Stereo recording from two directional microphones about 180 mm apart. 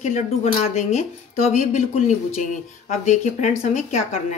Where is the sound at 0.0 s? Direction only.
40° left (ahead or behind).